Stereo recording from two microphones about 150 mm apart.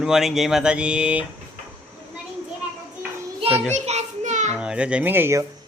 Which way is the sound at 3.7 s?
50° right (ahead or behind).